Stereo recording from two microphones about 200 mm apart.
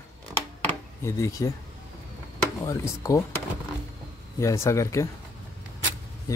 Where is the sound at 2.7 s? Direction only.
15° left (ahead or behind).